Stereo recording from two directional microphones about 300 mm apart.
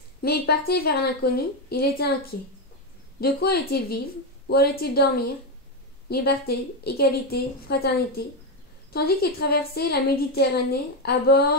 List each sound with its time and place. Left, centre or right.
0.2 s a woman's voice: left
3.2 s a woman's voice: left
6.0 s a woman's voice: left